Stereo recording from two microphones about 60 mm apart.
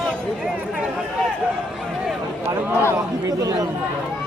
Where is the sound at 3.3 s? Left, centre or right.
Right.